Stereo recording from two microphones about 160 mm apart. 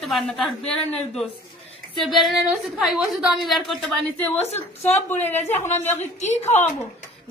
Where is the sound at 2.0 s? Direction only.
Centre (ahead or behind).